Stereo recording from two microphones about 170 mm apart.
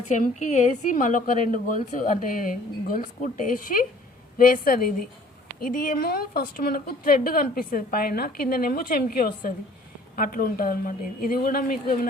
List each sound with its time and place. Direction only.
0.1 s a woman's voice: 45° left (ahead or behind)